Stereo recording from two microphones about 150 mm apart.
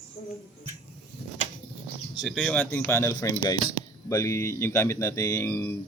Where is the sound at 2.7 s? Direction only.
15° left (ahead or behind).